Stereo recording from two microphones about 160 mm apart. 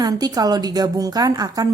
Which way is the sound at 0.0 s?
25° right (ahead or behind).